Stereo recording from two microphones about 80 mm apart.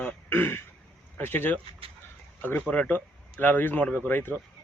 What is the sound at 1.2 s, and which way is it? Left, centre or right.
Speech, left.